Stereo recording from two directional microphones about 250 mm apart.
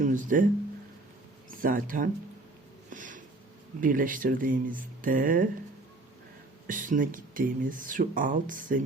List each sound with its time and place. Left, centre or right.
0.0 s speech: right
1.6 s speech: right
2.9 s a sound: right
3.8 s speech: right
6.7 s speech: right